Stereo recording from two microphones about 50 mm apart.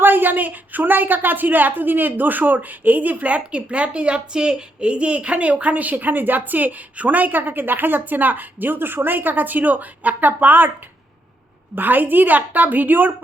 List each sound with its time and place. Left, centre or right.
0.0 s a woman's voice: right
11.7 s a woman's voice: right